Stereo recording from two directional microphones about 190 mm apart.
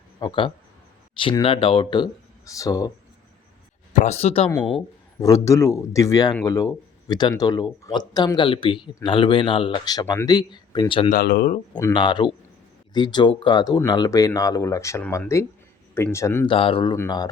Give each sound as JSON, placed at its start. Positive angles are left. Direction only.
{"t": 0.2, "sound": "speech", "side_deg": 25}
{"t": 3.9, "sound": "speech", "side_deg": 35}
{"t": 4.4, "sound": "speech", "side_deg": 10}
{"t": 11.1, "sound": "speech", "side_deg": 55}
{"t": 11.7, "sound": "speech", "side_deg": 20}
{"t": 16.5, "sound": "speech", "side_deg": 25}